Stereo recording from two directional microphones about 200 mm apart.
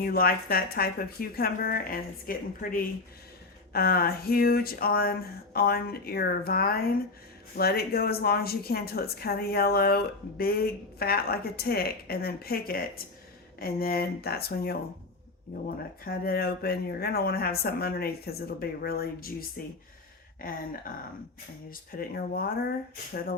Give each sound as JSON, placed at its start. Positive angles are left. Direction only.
{"t": 0.0, "sound": "a woman's voice", "side_deg": 45}
{"t": 16.0, "sound": "a woman's voice", "side_deg": 50}
{"t": 21.7, "sound": "a woman's voice", "side_deg": 45}